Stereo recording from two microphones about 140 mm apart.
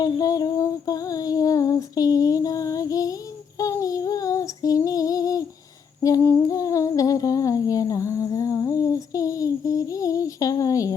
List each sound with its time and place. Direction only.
0.0 s music: 25° left (ahead or behind)
3.6 s female singing: 25° left (ahead or behind)
6.0 s humming: 20° left (ahead or behind)